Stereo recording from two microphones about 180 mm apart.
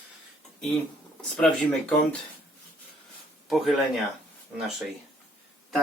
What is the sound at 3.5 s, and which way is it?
Speech, centre (ahead or behind).